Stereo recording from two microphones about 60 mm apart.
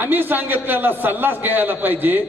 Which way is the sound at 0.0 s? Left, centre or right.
Right.